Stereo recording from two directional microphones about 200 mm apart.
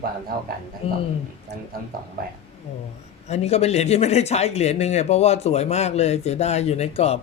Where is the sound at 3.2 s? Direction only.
35° left (ahead or behind).